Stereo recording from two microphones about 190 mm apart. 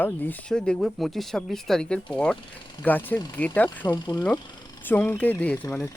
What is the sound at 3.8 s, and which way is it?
Speech, 20° left (ahead or behind).